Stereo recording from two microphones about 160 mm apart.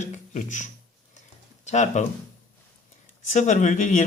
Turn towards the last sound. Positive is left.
turn(degrees=50)  # may be behind; listen again after turning